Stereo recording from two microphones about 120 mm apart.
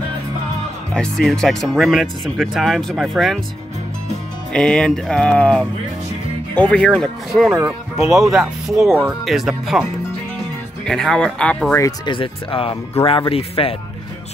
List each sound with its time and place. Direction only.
0.9 s speech: 5° left (ahead or behind)
4.5 s speech: 5° left (ahead or behind)
10.9 s speech: 5° left (ahead or behind)
12.1 s speech: 45° left (ahead or behind)